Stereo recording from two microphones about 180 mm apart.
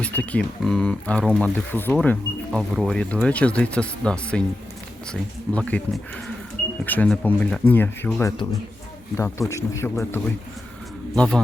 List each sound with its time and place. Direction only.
0.0 s speech: 5° left (ahead or behind)
6.8 s speech: 10° left (ahead or behind)